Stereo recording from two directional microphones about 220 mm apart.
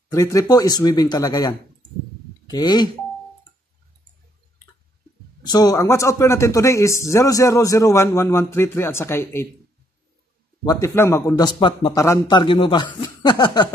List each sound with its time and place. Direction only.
0.1 s a man's voice: 15° left (ahead or behind)
5.4 s a man's voice: 15° left (ahead or behind)
10.6 s a man's voice: 15° left (ahead or behind)